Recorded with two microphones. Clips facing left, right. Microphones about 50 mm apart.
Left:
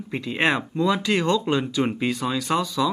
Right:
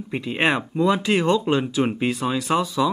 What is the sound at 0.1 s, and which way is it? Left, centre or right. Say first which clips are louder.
Speech: right 1 dB; centre.